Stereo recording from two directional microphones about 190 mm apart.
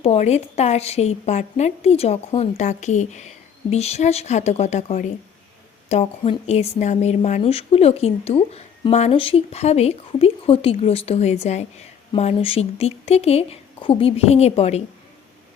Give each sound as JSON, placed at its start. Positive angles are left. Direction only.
{"t": 0.0, "sound": "a woman's voice", "side_deg": 35}